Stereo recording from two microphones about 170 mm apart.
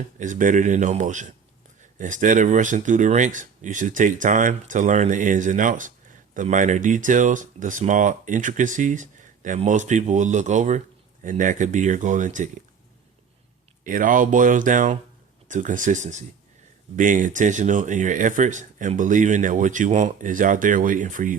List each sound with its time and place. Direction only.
0.2 s speech: 50° right (ahead or behind)
13.8 s speech: 50° right (ahead or behind)